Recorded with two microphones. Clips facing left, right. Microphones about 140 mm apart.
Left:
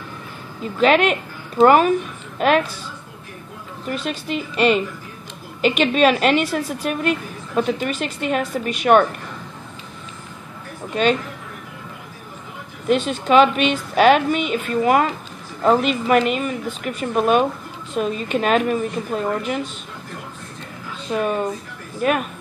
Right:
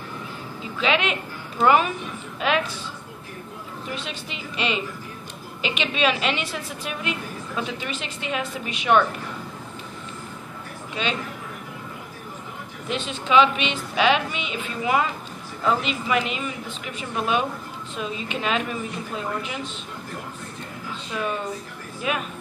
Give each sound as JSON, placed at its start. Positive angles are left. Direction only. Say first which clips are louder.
{"t": 0.7, "sound": "a woman's voice", "louder": "left 8 dB", "side_deg": 50}
{"t": 3.9, "sound": "a woman's voice", "louder": "left 11 dB", "side_deg": 45}
{"t": 11.0, "sound": "a woman's voice", "louder": "left 10 dB", "side_deg": 50}
{"t": 12.8, "sound": "a woman's voice", "louder": "left 10 dB", "side_deg": 50}
{"t": 22.0, "sound": "a woman's voice", "louder": "left 8 dB", "side_deg": 50}